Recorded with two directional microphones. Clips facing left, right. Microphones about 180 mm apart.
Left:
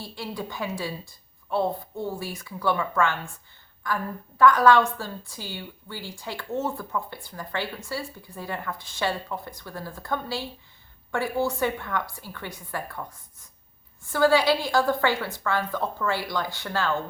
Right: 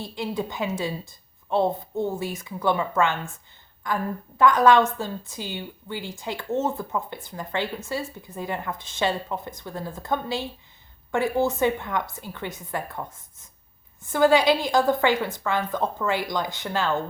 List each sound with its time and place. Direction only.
0.0 s a woman's voice: 20° right (ahead or behind)